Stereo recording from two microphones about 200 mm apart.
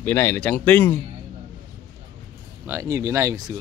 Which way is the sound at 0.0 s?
10° left (ahead or behind).